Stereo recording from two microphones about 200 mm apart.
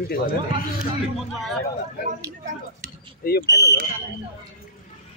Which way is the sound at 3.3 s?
55° left (ahead or behind).